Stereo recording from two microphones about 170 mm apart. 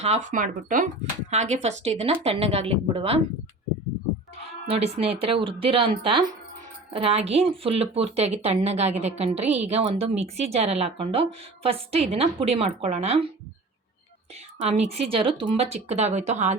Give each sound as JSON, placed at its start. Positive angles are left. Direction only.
{"t": 0.0, "sound": "speech", "side_deg": -45}
{"t": 1.3, "sound": "speech", "side_deg": -40}
{"t": 4.7, "sound": "speech", "side_deg": -35}
{"t": 14.7, "sound": "speech", "side_deg": -40}